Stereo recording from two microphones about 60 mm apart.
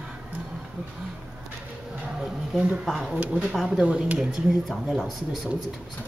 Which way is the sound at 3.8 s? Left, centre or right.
Centre.